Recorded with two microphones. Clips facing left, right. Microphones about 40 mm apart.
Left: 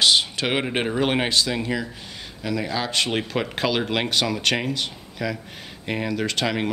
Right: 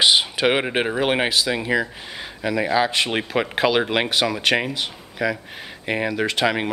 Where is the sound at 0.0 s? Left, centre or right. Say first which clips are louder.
Right 3 dB; centre.